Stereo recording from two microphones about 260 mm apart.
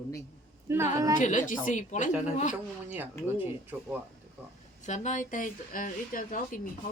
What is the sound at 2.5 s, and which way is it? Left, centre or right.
A woman's voice, centre.